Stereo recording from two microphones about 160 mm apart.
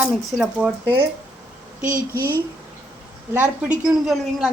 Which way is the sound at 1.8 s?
60° right (ahead or behind).